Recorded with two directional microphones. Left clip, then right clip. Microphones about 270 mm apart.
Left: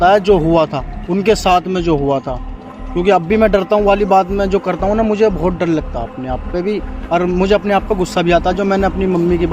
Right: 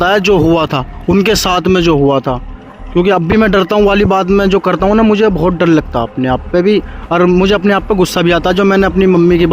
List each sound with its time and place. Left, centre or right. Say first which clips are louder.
0.0 s speech: right 1 dB; right